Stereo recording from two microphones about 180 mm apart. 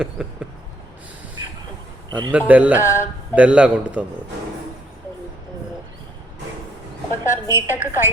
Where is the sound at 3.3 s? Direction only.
5° right (ahead or behind).